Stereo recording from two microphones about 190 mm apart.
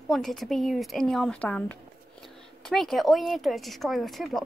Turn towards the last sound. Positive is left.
turn(degrees=0)  # may be behind; listen again after turning